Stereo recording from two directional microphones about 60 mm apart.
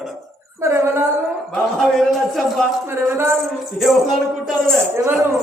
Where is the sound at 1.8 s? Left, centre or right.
Centre.